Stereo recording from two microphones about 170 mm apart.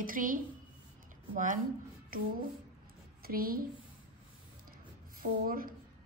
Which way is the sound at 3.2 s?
60° right (ahead or behind).